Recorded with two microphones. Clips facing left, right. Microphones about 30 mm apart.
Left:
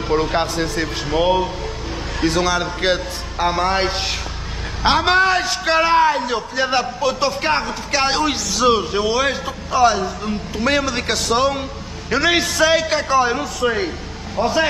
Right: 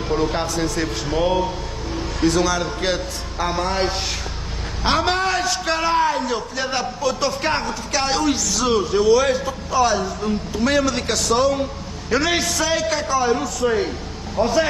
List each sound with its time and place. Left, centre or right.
0.1 s a man's voice: left
7.6 s a man's voice: left
10.2 s a man's voice: centre
11.3 s a man's voice: left
12.1 s a man's voice: centre
12.6 s a man's voice: left
14.3 s a man's voice: centre